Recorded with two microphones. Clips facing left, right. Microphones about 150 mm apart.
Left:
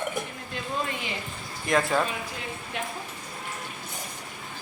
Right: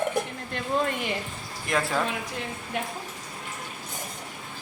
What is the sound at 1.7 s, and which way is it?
Speech, centre (ahead or behind).